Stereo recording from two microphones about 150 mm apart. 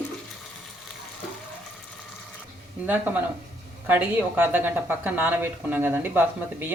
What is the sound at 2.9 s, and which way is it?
A woman's voice, 10° right (ahead or behind).